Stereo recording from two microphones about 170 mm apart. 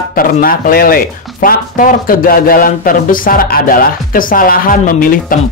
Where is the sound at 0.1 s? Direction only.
55° left (ahead or behind).